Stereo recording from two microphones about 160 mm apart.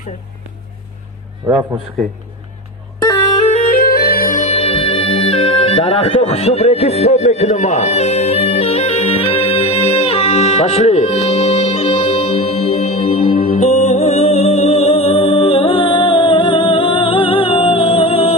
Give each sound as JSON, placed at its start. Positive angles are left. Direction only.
{"t": 1.4, "sound": "a man's voice", "side_deg": -15}
{"t": 3.7, "sound": "music", "side_deg": 75}